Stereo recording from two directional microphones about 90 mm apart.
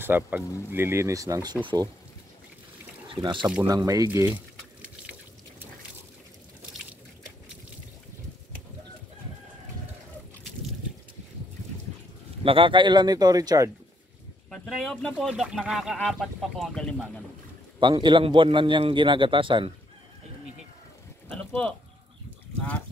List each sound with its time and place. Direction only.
0.0 s speech: 20° right (ahead or behind); by 1.5 s 40° right (ahead or behind)
3.2 s a man's voice: 60° right (ahead or behind)
3.6 s speech: 40° right (ahead or behind)
12.4 s speech: 75° right (ahead or behind); by 13.7 s 45° right (ahead or behind)
14.5 s speech: 5° left (ahead or behind)
15.2 s speech: 5° right (ahead or behind); by 17.2 s 10° left (ahead or behind)
17.7 s a man's voice: 60° right (ahead or behind)